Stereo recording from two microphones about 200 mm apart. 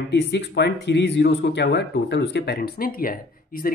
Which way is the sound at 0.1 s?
60° left (ahead or behind).